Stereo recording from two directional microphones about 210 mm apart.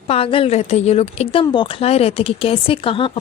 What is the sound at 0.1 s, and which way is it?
Speech, 25° left (ahead or behind).